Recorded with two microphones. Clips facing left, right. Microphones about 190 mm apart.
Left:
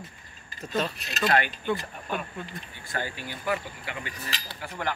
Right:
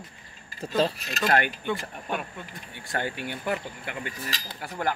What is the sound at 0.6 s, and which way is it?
Speech, 30° right (ahead or behind).